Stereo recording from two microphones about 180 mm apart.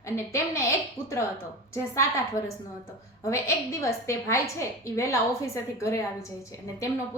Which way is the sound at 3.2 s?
15° left (ahead or behind).